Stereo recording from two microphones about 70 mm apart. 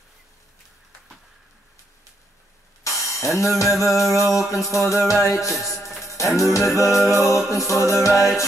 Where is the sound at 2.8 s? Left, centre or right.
Left.